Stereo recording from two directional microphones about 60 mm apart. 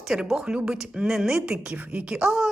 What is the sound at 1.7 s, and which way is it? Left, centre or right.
Speech, right.